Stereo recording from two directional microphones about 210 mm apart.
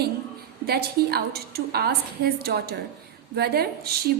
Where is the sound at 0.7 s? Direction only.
50° right (ahead or behind).